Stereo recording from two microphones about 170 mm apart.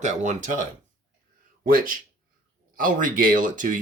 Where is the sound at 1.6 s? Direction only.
55° right (ahead or behind).